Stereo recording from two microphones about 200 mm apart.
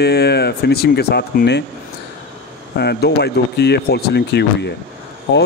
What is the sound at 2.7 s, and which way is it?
Speech, 55° left (ahead or behind).